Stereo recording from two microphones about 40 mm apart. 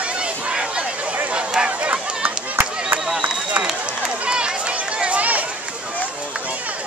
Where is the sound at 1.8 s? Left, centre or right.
Right.